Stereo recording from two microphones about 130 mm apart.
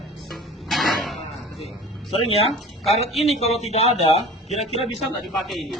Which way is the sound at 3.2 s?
55° left (ahead or behind).